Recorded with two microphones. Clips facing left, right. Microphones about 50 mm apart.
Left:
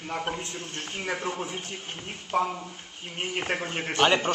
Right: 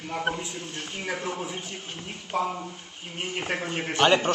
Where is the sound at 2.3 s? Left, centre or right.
Left.